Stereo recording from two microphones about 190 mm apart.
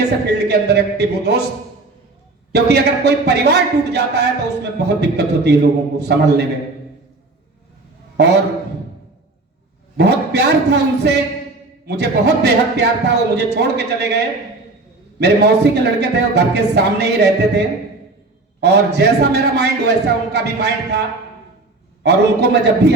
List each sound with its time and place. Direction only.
0.3 s a man's voice: 60° right (ahead or behind)
2.5 s a man's voice: 60° right (ahead or behind)
8.1 s a man's voice: 60° right (ahead or behind)
10.0 s a man's voice: 60° right (ahead or behind)
15.2 s a man's voice: 60° right (ahead or behind)
18.6 s a man's voice: 60° right (ahead or behind)
22.0 s a man's voice: 60° right (ahead or behind)